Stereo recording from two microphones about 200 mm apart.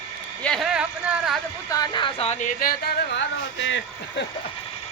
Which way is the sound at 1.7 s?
20° left (ahead or behind).